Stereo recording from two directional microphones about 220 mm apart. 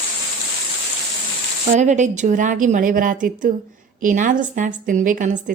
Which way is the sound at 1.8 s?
35° right (ahead or behind).